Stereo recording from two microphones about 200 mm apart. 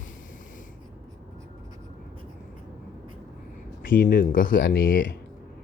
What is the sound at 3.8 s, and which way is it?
Speech, 45° left (ahead or behind).